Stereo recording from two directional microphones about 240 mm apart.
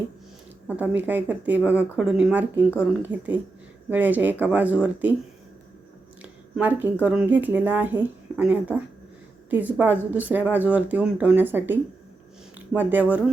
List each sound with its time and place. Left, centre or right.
0.8 s speech: centre
6.2 s a sound: centre
7.0 s speech: centre